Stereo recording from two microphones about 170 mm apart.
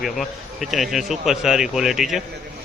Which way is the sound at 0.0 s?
Centre (ahead or behind).